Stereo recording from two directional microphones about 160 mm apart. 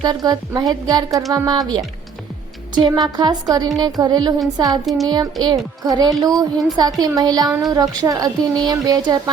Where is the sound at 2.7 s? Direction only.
25° right (ahead or behind).